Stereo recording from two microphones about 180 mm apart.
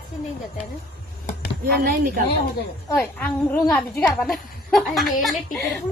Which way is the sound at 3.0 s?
10° left (ahead or behind).